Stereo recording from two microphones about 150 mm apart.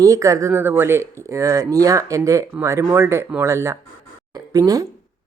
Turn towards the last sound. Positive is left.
turn(degrees=-20)  # may be behind; listen again after turning